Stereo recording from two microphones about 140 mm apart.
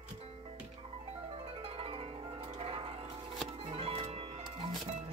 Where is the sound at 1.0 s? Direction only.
45° right (ahead or behind).